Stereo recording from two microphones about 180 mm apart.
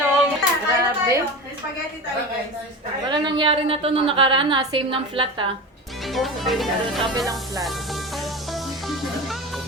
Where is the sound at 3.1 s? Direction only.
25° right (ahead or behind).